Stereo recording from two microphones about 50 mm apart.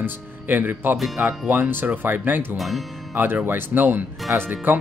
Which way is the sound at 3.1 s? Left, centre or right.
Right.